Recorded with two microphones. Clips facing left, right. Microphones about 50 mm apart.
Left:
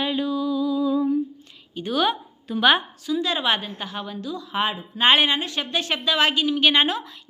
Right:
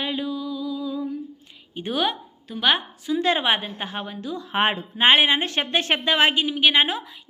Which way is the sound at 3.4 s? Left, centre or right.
Right.